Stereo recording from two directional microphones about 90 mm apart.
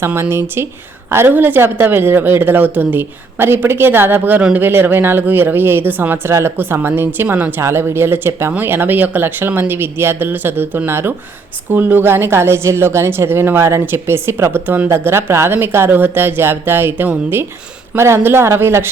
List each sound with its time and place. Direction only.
0.0 s a woman's voice: 30° right (ahead or behind)
7.6 s a woman's voice: 30° right (ahead or behind)